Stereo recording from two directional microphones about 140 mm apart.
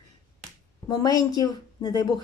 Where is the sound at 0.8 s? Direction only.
25° left (ahead or behind).